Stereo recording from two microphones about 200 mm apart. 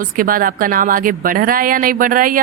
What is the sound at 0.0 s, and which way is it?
Speech, 45° right (ahead or behind).